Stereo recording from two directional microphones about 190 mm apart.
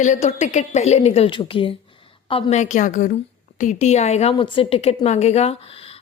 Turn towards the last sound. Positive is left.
turn(degrees=30)  # may be behind; listen again after turning